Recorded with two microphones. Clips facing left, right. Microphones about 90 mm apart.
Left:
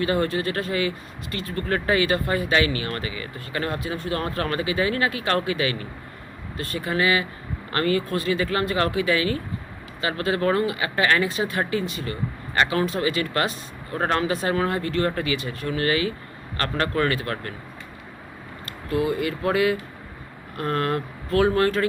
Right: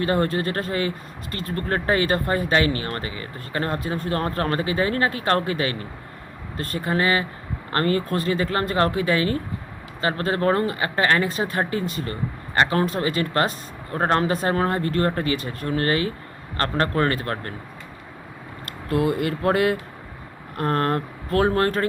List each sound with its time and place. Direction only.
0.0 s speech: 40° right (ahead or behind)
18.9 s speech: 55° right (ahead or behind); by 21.8 s 40° right (ahead or behind)